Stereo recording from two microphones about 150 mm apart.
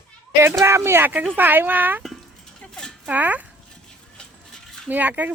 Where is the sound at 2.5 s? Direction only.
5° left (ahead or behind).